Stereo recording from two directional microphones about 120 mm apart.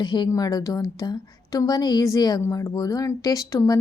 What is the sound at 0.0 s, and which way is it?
A woman's voice, 40° left (ahead or behind).